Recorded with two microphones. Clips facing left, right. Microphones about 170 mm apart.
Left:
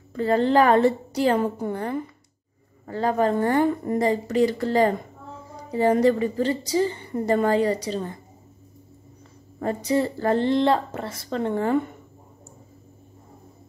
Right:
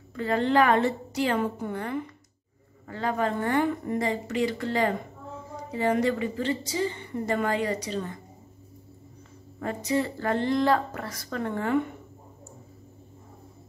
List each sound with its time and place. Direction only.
0.1 s a woman's voice: 35° left (ahead or behind)
9.6 s a woman's voice: 35° left (ahead or behind)